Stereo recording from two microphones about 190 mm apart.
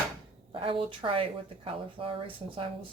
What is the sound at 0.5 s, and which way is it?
Speech, 30° right (ahead or behind).